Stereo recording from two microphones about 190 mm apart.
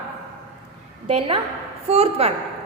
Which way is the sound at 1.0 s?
30° right (ahead or behind).